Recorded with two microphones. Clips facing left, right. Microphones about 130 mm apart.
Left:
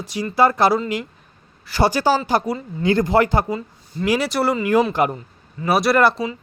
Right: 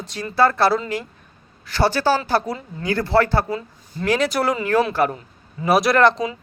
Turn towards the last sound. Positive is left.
turn(degrees=5)  # may be behind; listen again after turning